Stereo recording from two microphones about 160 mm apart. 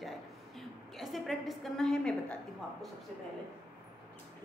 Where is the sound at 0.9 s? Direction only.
Centre (ahead or behind).